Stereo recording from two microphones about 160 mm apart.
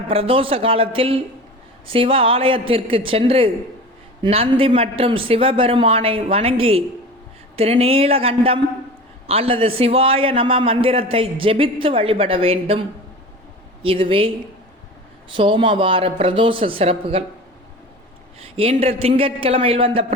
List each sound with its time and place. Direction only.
0.1 s a man's voice: 35° right (ahead or behind)
13.8 s a man's voice: 35° right (ahead or behind)
15.4 s a man's voice: 30° right (ahead or behind)
18.3 s a man's voice: 35° right (ahead or behind)